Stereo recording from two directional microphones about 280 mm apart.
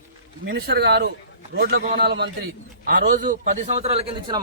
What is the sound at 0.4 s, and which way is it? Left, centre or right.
A man's voice, right.